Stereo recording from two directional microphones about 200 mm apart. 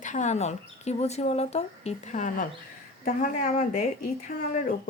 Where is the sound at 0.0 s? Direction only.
35° left (ahead or behind).